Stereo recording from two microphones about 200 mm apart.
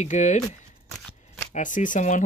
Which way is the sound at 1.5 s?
40° left (ahead or behind).